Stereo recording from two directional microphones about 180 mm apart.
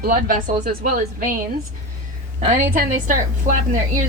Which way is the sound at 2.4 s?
45° right (ahead or behind).